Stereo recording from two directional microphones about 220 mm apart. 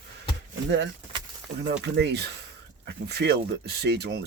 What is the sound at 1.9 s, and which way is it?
Speech, 50° right (ahead or behind).